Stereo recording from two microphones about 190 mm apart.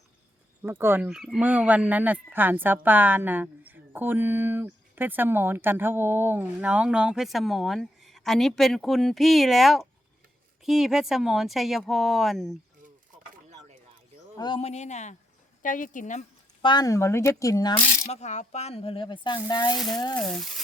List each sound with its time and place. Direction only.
0.6 s a woman's voice: 10° right (ahead or behind)
13.5 s a sound: 35° right (ahead or behind)
14.3 s a woman's voice: 25° left (ahead or behind); by 16.2 s 40° left (ahead or behind)
16.6 s speech: 20° left (ahead or behind)
18.1 s speech: 35° left (ahead or behind); by 20.1 s 20° left (ahead or behind)
20.1 s speech: 5° left (ahead or behind)